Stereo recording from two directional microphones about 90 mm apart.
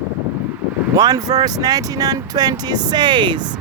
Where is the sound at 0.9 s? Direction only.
45° right (ahead or behind).